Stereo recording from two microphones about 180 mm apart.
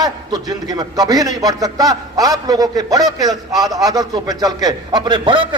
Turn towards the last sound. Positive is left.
turn(degrees=-25)  # may be behind; listen again after turning